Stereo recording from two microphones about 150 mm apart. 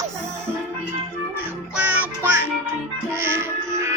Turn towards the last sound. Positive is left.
turn(degrees=-15)  # may be behind; listen again after turning